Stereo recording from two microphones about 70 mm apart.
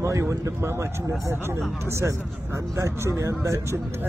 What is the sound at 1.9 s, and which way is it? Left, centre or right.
Speech, right.